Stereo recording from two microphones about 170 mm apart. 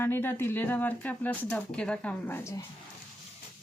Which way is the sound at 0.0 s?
15° left (ahead or behind).